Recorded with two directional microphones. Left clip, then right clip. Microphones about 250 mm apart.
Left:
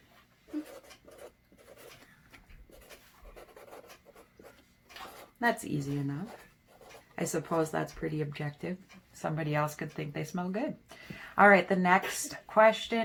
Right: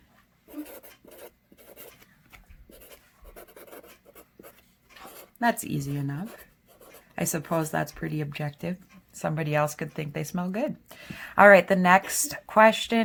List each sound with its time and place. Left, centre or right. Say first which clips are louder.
5.4 s speech: right 4 dB; right